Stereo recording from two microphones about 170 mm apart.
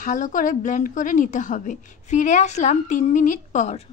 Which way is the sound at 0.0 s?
45° left (ahead or behind).